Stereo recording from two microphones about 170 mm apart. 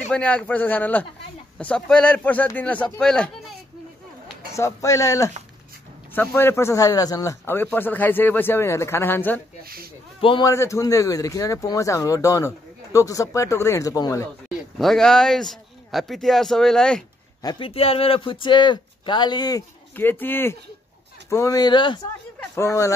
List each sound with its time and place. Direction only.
0.1 s speech: 5° left (ahead or behind)
4.6 s speech: 20° left (ahead or behind)
10.2 s speech: 30° left (ahead or behind)
10.5 s speech: 15° left (ahead or behind)
14.8 s a man's voice: 5° left (ahead or behind)
17.4 s speech: 25° left (ahead or behind)
20.0 s speech: 10° left (ahead or behind)